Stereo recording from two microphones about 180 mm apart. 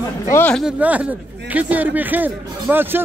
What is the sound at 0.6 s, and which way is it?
A man's voice, 5° right (ahead or behind).